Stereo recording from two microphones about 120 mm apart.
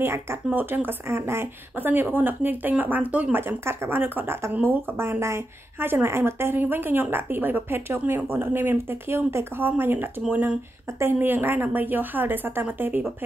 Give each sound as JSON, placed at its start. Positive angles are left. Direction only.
{"t": 0.0, "sound": "a woman's voice", "side_deg": -20}